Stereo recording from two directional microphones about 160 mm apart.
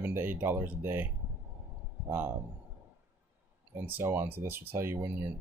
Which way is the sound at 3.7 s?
15° right (ahead or behind).